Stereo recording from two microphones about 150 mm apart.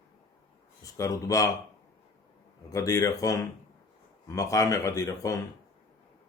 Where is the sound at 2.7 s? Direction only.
20° left (ahead or behind).